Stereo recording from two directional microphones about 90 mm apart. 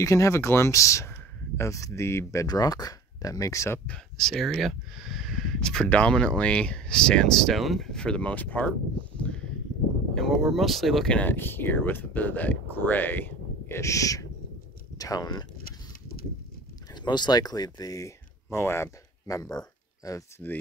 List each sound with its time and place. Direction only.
0.0 s speech: 35° left (ahead or behind)
2.4 s speech: 45° left (ahead or behind)
3.8 s speech: 10° left (ahead or behind)
9.1 s a sound: 15° left (ahead or behind)
10.1 s speech: centre (ahead or behind)
11.1 s speech: 20° left (ahead or behind)
13.7 s speech: 35° left (ahead or behind)
16.9 s speech: 55° left (ahead or behind); by 20.4 s 35° left (ahead or behind)